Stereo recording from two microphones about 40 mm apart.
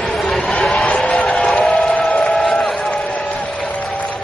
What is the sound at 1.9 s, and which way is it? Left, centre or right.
Train, left.